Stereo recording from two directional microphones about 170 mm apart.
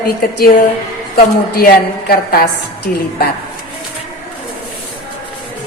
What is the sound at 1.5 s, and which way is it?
A woman's voice, 65° left (ahead or behind).